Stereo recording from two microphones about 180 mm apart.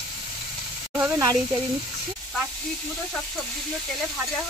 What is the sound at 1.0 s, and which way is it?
Speech, 15° right (ahead or behind).